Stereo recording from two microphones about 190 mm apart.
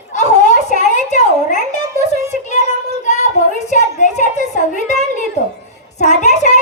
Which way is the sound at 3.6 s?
40° left (ahead or behind).